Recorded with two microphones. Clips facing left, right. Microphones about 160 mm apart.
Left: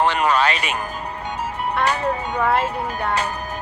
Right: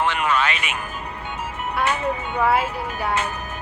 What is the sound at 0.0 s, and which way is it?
Music, 35° left (ahead or behind).